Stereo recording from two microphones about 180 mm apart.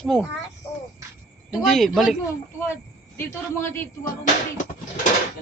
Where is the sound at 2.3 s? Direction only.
15° left (ahead or behind).